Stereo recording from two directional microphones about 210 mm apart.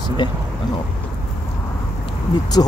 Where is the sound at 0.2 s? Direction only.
20° left (ahead or behind).